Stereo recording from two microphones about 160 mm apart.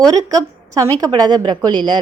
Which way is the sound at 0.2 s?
20° right (ahead or behind).